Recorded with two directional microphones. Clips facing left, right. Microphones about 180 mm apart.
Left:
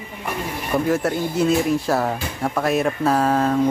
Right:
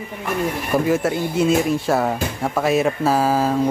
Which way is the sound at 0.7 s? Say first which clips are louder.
Even; 5° right (ahead or behind).